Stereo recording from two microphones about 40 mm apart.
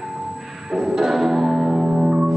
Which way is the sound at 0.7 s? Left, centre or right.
Centre.